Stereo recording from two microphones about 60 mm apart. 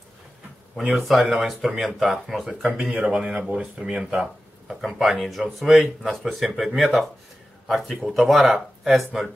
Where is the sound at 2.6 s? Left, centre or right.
Right.